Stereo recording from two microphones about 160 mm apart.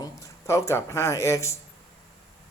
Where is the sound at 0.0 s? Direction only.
20° left (ahead or behind).